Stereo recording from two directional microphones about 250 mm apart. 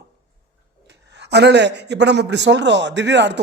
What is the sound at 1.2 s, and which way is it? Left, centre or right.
A man's voice, right.